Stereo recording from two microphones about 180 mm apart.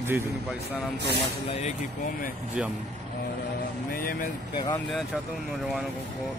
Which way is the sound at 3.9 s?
55° left (ahead or behind).